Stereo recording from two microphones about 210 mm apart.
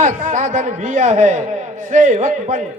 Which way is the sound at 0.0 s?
40° right (ahead or behind).